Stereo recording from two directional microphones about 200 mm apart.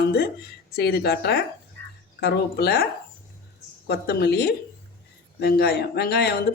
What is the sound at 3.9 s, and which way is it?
Speech, 55° left (ahead or behind).